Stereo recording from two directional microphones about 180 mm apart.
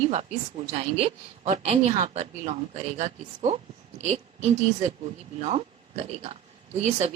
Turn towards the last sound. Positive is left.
turn(degrees=-40)  # may be behind; listen again after turning